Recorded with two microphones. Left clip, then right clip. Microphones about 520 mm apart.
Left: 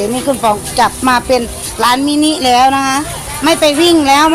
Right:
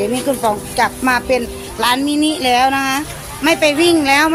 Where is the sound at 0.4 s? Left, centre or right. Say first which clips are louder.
Left 6 dB; right.